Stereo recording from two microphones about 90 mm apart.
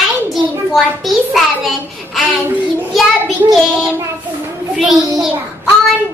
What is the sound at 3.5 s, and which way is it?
A child's voice, centre (ahead or behind).